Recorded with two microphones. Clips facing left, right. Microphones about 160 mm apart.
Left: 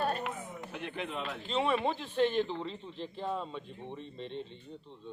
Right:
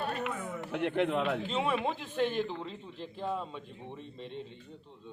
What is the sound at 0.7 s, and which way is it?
Speech, 70° right (ahead or behind).